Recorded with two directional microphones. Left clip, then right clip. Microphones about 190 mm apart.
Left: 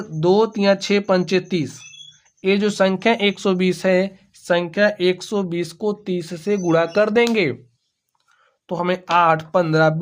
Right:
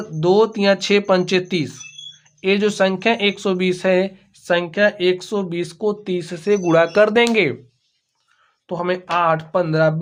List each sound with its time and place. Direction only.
0.0 s speech: 15° left (ahead or behind)
8.6 s speech: 30° left (ahead or behind)